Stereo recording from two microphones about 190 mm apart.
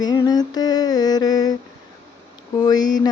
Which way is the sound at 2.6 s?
20° left (ahead or behind).